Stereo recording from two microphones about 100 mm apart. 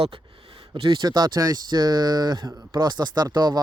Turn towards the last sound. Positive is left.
turn(degrees=-45)  # may be behind; listen again after turning